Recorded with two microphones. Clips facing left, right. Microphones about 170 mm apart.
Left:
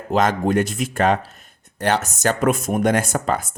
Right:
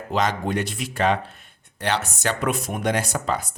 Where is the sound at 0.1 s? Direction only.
50° left (ahead or behind).